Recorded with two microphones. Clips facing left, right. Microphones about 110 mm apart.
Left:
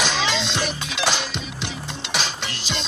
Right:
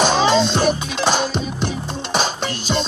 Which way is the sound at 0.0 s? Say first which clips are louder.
Right 9 dB; 45° right (ahead or behind).